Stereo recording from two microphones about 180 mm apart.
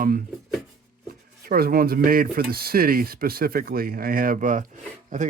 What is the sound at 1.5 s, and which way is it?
Speech, 55° right (ahead or behind).